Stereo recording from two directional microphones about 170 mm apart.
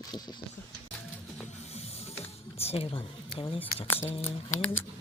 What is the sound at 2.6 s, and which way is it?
Speech, 35° left (ahead or behind).